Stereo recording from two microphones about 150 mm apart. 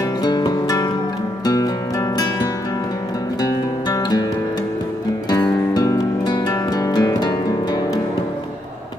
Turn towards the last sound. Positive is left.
turn(degrees=25)  # may be behind; listen again after turning